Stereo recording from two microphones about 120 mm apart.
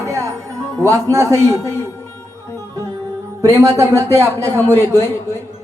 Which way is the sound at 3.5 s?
25° right (ahead or behind).